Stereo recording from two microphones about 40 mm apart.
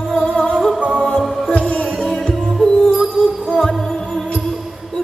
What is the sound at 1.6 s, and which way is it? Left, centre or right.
Music, left.